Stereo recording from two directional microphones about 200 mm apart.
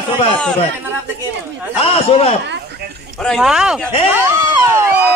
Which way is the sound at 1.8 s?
30° left (ahead or behind).